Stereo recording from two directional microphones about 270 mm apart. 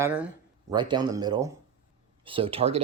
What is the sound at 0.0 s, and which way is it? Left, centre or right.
Speech, centre.